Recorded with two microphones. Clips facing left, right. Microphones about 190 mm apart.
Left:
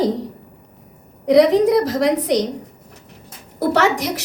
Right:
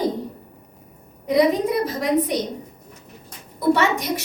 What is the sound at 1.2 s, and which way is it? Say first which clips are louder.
A woman's voice: left 6 dB; 80° left.